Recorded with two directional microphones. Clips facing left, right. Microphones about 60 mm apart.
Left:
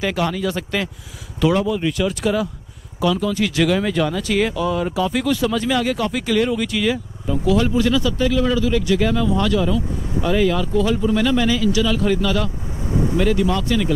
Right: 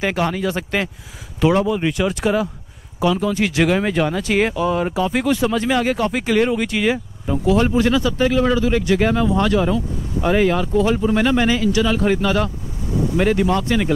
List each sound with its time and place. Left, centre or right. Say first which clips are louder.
0.0 s speech: right 1 dB; right